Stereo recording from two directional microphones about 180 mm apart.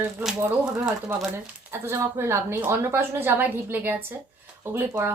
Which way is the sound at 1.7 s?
15° right (ahead or behind).